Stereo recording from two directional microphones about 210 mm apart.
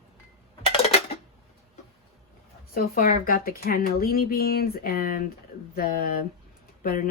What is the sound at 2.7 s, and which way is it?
Speech, 45° left (ahead or behind).